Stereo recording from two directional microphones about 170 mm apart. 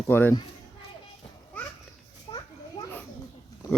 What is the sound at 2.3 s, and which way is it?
Children playing, 25° left (ahead or behind).